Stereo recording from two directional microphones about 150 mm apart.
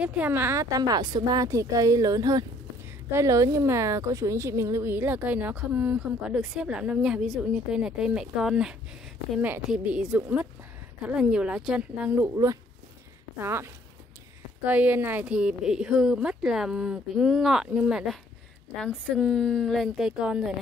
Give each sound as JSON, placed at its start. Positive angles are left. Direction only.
{"t": 0.0, "sound": "a woman's voice", "side_deg": -10}
{"t": 13.4, "sound": "a woman's voice", "side_deg": -15}